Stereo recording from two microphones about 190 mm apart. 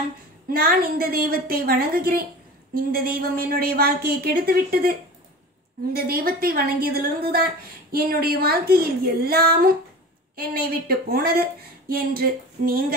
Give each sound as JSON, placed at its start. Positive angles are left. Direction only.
{"t": 0.5, "sound": "speech", "side_deg": -50}
{"t": 5.9, "sound": "speech", "side_deg": -50}